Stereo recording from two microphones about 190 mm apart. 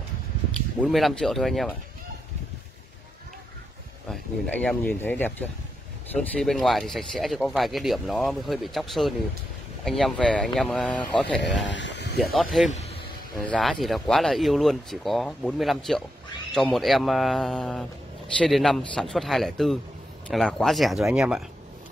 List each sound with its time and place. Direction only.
0.7 s speech: centre (ahead or behind)
4.1 s speech: 5° left (ahead or behind)
11.6 s a sound: 70° left (ahead or behind)
12.2 s speech: centre (ahead or behind)
12.6 s vehicle: 35° left (ahead or behind)
13.4 s speech: 5° left (ahead or behind)